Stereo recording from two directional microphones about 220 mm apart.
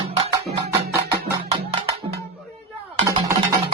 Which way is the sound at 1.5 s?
25° right (ahead or behind).